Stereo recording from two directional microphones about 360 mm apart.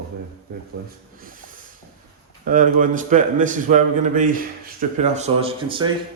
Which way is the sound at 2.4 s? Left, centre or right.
Right.